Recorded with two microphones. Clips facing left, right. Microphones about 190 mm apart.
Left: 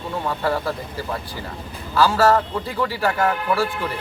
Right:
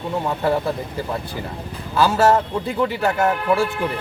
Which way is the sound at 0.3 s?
20° right (ahead or behind).